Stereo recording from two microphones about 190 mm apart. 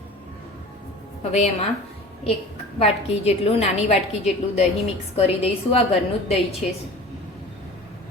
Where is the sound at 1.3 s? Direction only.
35° left (ahead or behind).